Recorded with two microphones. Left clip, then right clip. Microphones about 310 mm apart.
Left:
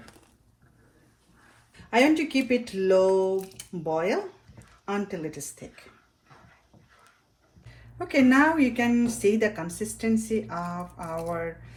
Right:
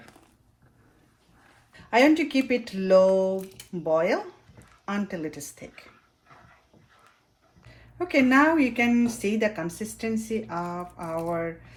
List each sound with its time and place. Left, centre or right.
1.9 s speech: right
7.9 s speech: right